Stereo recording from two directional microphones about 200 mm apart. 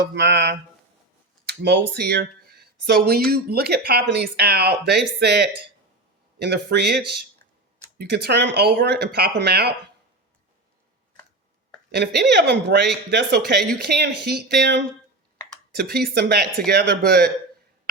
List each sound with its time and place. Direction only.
0.0 s speech: 55° right (ahead or behind)
1.5 s a sound: 55° right (ahead or behind)
1.9 s speech: 55° right (ahead or behind)
11.9 s speech: 55° right (ahead or behind)